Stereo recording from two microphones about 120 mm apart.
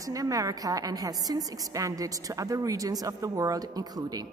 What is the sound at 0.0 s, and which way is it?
A woman's voice, 30° right (ahead or behind).